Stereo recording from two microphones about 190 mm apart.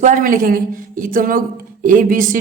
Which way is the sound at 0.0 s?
45° right (ahead or behind).